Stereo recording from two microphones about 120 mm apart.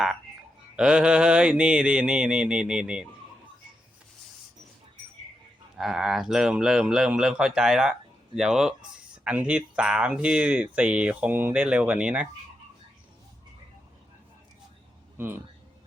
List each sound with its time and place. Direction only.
0.8 s speech: 10° right (ahead or behind)
5.7 s speech: 5° right (ahead or behind)